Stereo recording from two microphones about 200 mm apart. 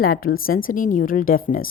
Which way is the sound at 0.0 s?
45° left (ahead or behind).